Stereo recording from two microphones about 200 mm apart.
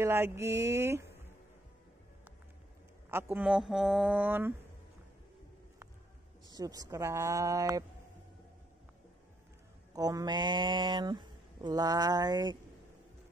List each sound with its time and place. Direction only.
0.0 s speech: 10° right (ahead or behind)
3.1 s speech: 10° right (ahead or behind)
6.5 s speech: 20° right (ahead or behind)
9.9 s speech: 20° right (ahead or behind)